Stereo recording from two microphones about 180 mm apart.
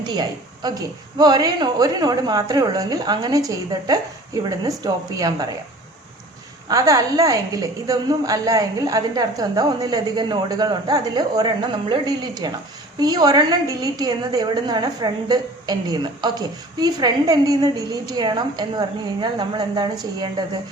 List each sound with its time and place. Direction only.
0.0 s a woman's voice: 25° right (ahead or behind)
6.7 s a woman's voice: 20° right (ahead or behind)